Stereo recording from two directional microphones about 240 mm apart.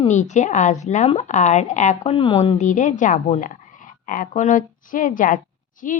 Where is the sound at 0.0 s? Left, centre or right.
Left.